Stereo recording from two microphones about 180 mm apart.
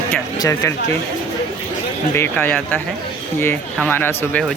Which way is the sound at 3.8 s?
10° left (ahead or behind).